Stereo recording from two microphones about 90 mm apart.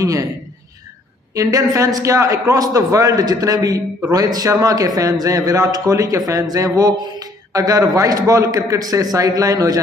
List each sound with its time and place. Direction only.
0.0 s a man's voice: 40° right (ahead or behind)
1.3 s a man's voice: 40° right (ahead or behind)